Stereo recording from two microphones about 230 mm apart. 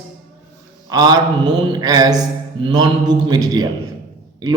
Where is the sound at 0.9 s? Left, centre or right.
Centre.